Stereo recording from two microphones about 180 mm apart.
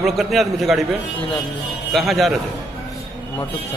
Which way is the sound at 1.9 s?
Centre (ahead or behind).